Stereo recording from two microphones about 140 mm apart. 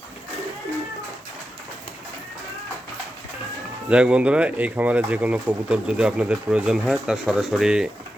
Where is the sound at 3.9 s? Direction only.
10° right (ahead or behind).